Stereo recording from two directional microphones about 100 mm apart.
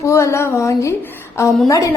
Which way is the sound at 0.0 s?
30° left (ahead or behind).